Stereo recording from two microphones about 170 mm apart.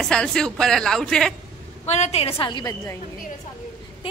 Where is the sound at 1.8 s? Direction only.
40° left (ahead or behind).